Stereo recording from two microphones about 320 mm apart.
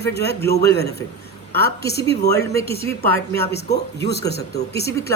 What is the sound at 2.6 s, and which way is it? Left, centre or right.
Speech, centre.